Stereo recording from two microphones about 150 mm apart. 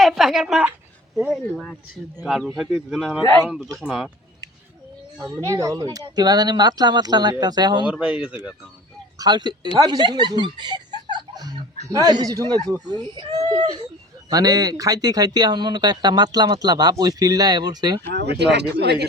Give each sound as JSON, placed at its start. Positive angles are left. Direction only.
{"t": 0.0, "sound": "a woman's voice", "side_deg": 0}
{"t": 5.3, "sound": "speech", "side_deg": -20}
{"t": 7.9, "sound": "speech", "side_deg": -5}
{"t": 9.1, "sound": "speech", "side_deg": -25}
{"t": 18.1, "sound": "speech", "side_deg": -90}